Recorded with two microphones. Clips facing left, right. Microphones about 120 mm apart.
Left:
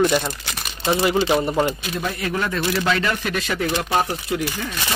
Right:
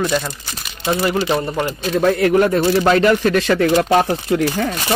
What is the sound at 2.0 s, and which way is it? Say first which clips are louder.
Speech: right 11 dB; 60° right (ahead or behind).